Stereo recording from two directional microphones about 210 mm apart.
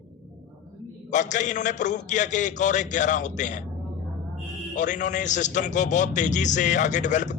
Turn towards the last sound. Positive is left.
turn(degrees=35)  # may be behind; listen again after turning